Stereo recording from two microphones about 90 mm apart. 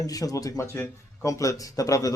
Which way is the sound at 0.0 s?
40° left (ahead or behind).